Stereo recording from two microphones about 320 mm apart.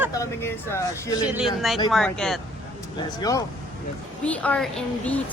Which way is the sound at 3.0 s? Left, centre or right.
Centre.